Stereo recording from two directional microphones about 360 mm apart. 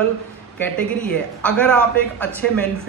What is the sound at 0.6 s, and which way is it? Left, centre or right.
A man's voice, centre.